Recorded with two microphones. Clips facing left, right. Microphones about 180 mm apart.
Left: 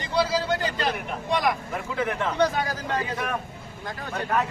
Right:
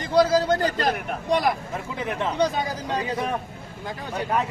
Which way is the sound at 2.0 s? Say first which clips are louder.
Even; 20° right (ahead or behind).